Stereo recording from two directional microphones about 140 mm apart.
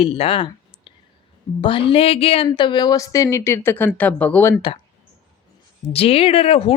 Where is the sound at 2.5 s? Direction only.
35° left (ahead or behind); by 4.6 s 10° left (ahead or behind).